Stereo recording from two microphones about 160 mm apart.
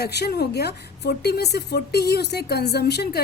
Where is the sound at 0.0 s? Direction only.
90° left.